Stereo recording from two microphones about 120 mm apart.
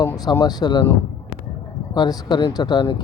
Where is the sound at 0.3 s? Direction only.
35° left (ahead or behind).